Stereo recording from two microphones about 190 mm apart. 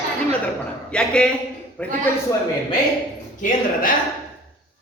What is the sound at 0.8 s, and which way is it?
A man's voice, 5° left (ahead or behind).